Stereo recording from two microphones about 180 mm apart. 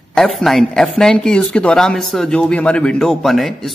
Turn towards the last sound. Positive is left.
turn(degrees=0)  # may be behind; listen again after turning